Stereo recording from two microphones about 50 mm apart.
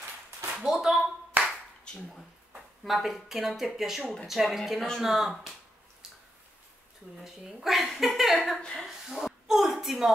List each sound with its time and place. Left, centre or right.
0.6 s speech: centre
1.4 s clapping: right
2.8 s speech: centre
6.0 s a sound: centre
7.2 s speech: centre
8.8 s a sound: centre